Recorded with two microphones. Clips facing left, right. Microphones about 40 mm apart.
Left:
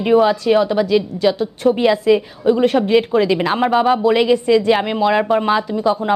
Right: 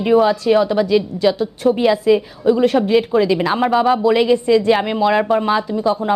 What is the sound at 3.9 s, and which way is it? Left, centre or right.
Speech, left.